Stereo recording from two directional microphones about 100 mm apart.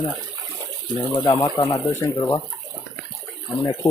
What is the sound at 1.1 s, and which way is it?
Speech, 50° left (ahead or behind).